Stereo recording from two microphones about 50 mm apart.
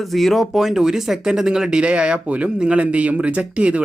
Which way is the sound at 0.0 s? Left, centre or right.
Centre.